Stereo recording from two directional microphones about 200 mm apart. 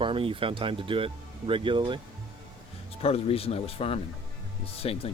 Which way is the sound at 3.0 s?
30° left (ahead or behind).